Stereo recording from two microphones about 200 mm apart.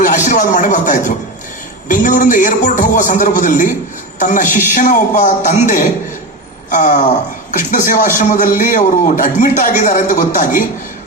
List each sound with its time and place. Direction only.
0.3 s a man's voice: 40° left (ahead or behind)